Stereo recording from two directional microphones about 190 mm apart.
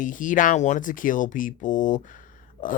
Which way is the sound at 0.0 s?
45° left (ahead or behind).